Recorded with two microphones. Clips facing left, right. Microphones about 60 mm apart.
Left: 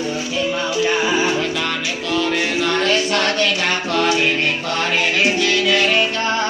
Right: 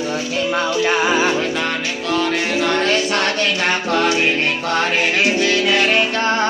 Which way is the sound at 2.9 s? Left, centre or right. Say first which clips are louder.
Even; right.